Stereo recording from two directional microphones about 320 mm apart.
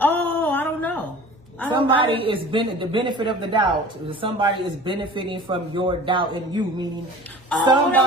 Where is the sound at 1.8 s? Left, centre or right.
Centre.